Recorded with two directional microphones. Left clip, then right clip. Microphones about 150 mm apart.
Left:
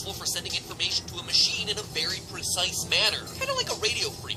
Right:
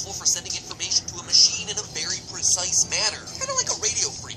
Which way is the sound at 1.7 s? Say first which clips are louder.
Even; 20° left (ahead or behind).